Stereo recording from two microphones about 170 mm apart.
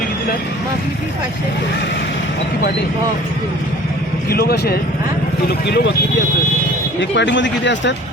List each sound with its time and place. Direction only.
4.3 s speech: 65° left (ahead or behind)
5.5 s speech: 80° left
7.0 s speech: 90° left